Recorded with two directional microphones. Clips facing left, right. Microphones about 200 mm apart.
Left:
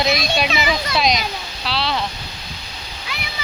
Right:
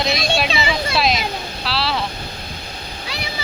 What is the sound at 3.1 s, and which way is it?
Splash, 35° right (ahead or behind).